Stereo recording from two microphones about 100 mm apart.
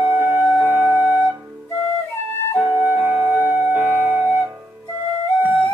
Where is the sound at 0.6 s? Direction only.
15° right (ahead or behind).